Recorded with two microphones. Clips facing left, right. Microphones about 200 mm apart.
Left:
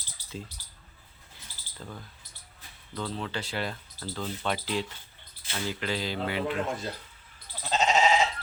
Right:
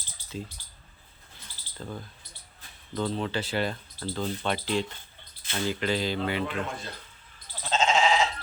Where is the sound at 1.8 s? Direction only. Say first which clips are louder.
Right 4 dB; 35° right (ahead or behind).